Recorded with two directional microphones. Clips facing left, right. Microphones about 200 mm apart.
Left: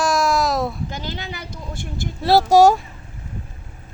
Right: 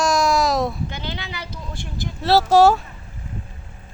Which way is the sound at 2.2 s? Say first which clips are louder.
Left 1 dB; 15° left (ahead or behind).